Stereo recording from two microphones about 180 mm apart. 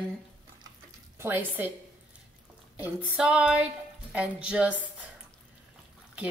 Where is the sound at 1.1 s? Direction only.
10° right (ahead or behind).